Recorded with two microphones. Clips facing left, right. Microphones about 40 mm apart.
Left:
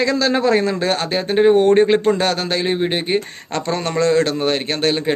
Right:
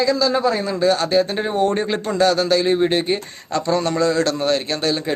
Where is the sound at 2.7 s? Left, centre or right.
Left.